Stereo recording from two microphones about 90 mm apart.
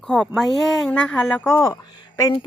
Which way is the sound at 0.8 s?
15° left (ahead or behind).